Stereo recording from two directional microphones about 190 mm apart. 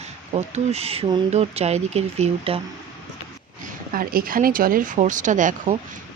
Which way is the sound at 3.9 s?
50° right (ahead or behind).